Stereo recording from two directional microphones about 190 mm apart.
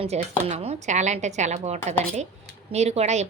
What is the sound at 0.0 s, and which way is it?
A woman's voice, 30° right (ahead or behind).